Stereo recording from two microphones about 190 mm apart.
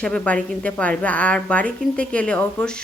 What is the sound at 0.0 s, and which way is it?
A woman's voice, 5° left (ahead or behind).